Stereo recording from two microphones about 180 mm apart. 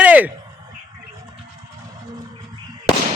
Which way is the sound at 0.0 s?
10° right (ahead or behind).